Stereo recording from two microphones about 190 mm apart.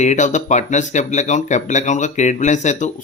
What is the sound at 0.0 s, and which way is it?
A man's voice, 40° left (ahead or behind).